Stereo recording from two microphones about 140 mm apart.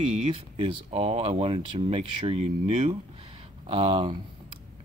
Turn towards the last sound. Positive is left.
turn(degrees=-40)  # may be behind; listen again after turning